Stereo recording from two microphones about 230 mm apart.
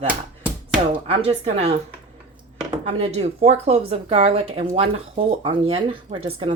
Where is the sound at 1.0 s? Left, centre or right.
Right.